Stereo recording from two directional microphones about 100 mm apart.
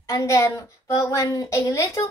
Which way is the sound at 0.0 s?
30° left (ahead or behind).